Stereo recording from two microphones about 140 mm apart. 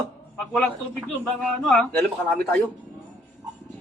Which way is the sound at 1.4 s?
10° left (ahead or behind).